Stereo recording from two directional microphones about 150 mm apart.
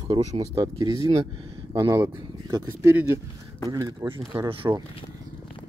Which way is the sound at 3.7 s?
25° right (ahead or behind).